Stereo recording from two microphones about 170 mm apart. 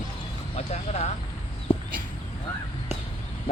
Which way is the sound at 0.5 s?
40° left (ahead or behind).